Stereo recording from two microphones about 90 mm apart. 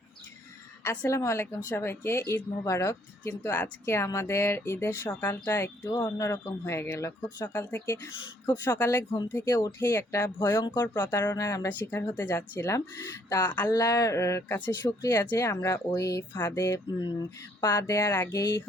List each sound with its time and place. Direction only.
0.9 s speech: 30° left (ahead or behind)
3.2 s speech: 25° left (ahead or behind)
9.5 s speech: 40° left (ahead or behind)
9.8 s speech: 30° left (ahead or behind)
10.6 s speech: 55° left (ahead or behind)
11.1 s speech: 35° left (ahead or behind)
11.7 s speech: 20° left (ahead or behind)
13.4 s speech: 20° left (ahead or behind)
13.7 s speech: 40° left (ahead or behind)
17.0 s speech: 45° left (ahead or behind)